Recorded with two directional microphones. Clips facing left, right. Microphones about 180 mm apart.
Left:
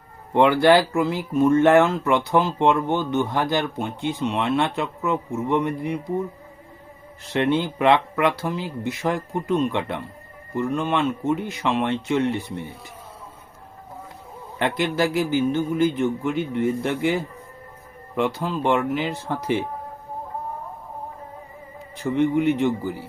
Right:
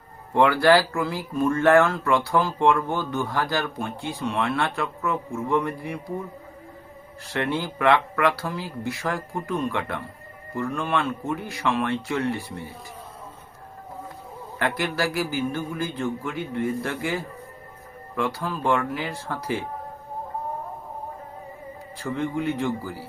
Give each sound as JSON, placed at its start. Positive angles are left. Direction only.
{"t": 0.3, "sound": "speech", "side_deg": 20}
{"t": 7.3, "sound": "speech", "side_deg": 20}
{"t": 14.6, "sound": "speech", "side_deg": 20}
{"t": 21.9, "sound": "speech", "side_deg": 20}